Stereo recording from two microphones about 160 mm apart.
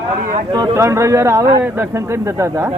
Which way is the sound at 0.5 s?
20° right (ahead or behind).